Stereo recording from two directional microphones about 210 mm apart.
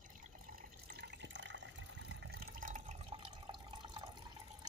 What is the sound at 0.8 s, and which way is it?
Water, 50° right (ahead or behind).